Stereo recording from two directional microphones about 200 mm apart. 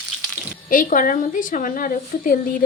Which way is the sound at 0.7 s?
40° left (ahead or behind).